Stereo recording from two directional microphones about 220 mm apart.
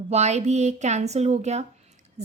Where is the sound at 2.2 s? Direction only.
30° right (ahead or behind).